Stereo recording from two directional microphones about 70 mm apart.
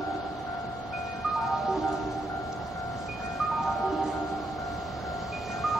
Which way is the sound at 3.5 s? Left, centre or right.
Centre.